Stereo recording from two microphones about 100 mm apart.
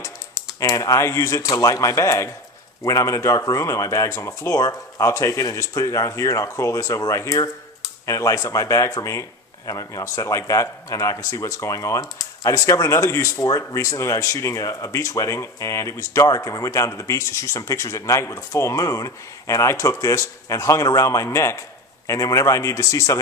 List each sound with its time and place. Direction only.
0.6 s a man's voice: 35° left (ahead or behind)